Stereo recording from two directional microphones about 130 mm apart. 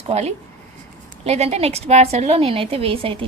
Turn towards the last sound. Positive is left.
turn(degrees=-45)  # may be behind; listen again after turning